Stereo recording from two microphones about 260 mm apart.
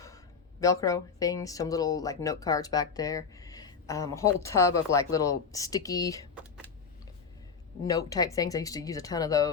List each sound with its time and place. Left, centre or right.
0.6 s speech: centre
7.9 s speech: centre